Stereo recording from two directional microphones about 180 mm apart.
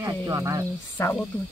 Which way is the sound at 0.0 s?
15° right (ahead or behind).